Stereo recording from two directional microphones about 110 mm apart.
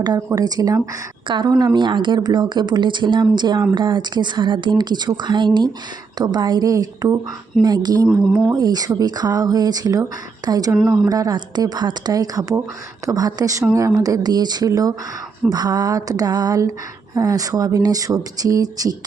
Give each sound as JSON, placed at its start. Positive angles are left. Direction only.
{"t": 0.3, "sound": "speech", "side_deg": -35}
{"t": 8.0, "sound": "speech", "side_deg": -5}
{"t": 8.5, "sound": "speech", "side_deg": -35}